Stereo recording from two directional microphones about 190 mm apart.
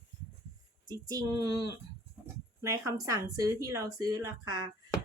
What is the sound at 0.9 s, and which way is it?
Speech, 20° right (ahead or behind).